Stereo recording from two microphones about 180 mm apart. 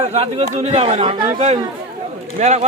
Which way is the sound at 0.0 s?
35° right (ahead or behind).